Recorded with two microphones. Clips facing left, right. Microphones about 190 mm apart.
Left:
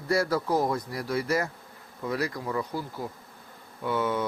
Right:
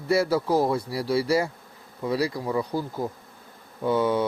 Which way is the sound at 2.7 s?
35° right (ahead or behind).